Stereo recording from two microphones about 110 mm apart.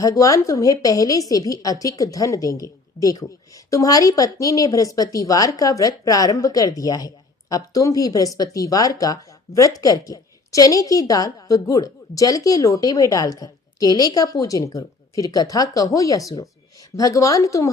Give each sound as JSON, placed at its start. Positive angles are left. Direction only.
{"t": 0.0, "sound": "a woman's voice", "side_deg": 30}